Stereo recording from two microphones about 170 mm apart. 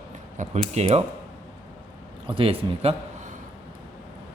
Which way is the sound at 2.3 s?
30° right (ahead or behind).